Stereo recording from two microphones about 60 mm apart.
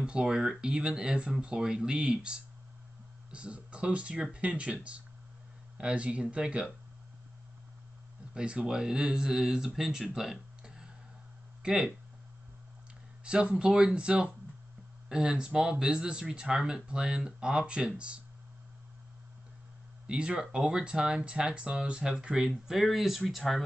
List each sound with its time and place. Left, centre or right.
0.0 s speech: centre
8.4 s speech: centre
10.1 s a sound: centre
11.6 s speech: centre
13.2 s speech: centre
20.1 s speech: centre